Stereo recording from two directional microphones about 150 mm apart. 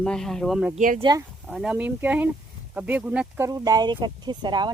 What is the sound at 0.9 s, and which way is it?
Speech, 30° right (ahead or behind).